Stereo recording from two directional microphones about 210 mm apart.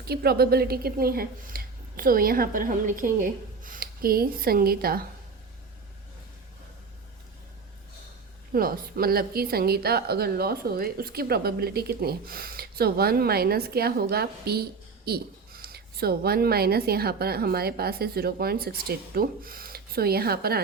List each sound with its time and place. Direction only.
0.0 s speech: 50° right (ahead or behind)
8.5 s a woman's voice: 45° right (ahead or behind)